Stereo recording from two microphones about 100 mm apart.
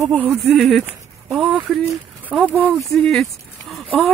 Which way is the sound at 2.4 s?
15° right (ahead or behind).